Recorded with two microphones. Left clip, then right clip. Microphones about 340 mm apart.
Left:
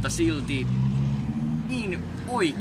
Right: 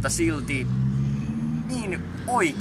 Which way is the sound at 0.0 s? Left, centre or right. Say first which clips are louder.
Right 1 dB; centre.